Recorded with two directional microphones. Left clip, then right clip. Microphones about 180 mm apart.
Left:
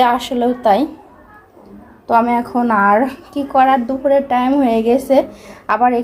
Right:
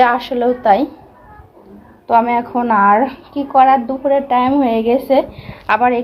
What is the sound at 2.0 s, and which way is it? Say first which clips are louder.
A woman's voice: right 1 dB; 20° left (ahead or behind).